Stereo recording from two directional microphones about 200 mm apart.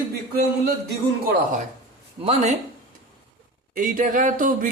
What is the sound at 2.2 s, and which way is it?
Speech, 30° right (ahead or behind).